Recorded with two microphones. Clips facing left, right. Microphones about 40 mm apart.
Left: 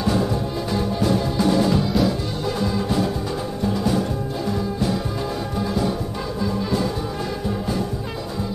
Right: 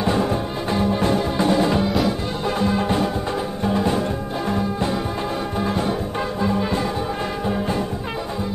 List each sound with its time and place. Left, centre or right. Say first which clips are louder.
0.0 s music: right 1 dB; right